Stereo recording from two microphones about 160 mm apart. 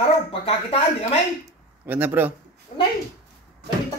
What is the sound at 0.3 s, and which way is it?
Speech, 35° left (ahead or behind).